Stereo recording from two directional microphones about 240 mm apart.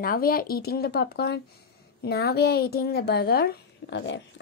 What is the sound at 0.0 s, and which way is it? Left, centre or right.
A woman's voice, left.